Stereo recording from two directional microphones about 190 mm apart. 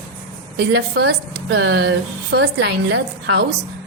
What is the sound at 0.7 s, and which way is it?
A woman's voice, 60° right (ahead or behind).